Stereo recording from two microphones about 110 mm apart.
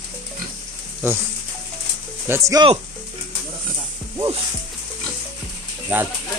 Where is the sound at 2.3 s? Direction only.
30° right (ahead or behind).